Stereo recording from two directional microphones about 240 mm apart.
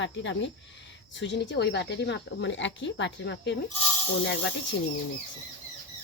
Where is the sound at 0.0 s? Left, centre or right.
Left.